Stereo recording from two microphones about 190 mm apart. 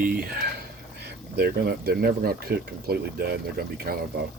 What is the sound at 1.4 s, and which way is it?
Speech, 55° right (ahead or behind).